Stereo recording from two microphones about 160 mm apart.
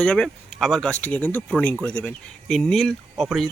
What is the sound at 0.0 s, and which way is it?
Speech, 5° left (ahead or behind).